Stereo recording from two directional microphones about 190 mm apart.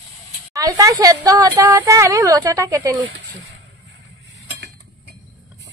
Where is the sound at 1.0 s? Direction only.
20° right (ahead or behind).